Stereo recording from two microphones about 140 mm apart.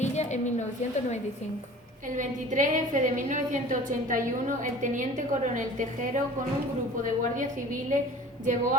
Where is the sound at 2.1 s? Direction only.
65° right (ahead or behind).